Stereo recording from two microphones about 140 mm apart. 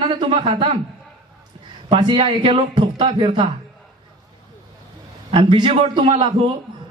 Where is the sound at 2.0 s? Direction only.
35° right (ahead or behind).